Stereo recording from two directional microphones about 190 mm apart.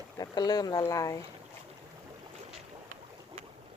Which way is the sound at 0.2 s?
20° left (ahead or behind).